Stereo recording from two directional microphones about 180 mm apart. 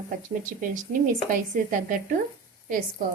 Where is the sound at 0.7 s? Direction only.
50° right (ahead or behind).